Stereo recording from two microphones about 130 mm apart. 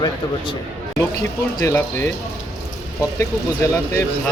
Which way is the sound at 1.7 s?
25° left (ahead or behind).